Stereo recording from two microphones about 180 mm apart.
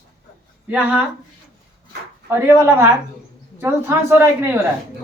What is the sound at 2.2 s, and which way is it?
Speech, 15° right (ahead or behind).